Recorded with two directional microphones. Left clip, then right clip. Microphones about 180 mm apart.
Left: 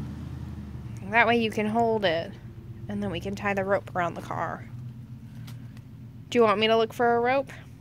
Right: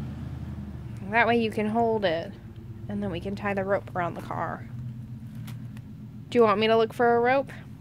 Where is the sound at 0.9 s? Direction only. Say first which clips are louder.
Left 1 dB; centre (ahead or behind).